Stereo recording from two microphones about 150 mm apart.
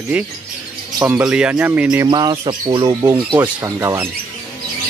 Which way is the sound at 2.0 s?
30° right (ahead or behind).